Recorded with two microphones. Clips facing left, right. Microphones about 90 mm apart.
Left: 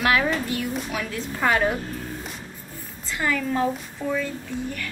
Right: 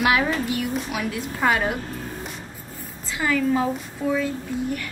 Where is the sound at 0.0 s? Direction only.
5° right (ahead or behind).